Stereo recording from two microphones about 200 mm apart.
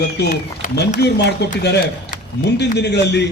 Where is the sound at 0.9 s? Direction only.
55° left (ahead or behind).